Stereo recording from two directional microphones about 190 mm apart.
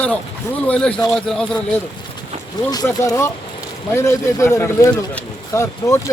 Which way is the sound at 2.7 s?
20° left (ahead or behind).